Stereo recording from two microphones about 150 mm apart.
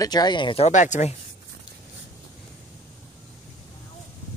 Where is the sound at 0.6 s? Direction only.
55° left (ahead or behind).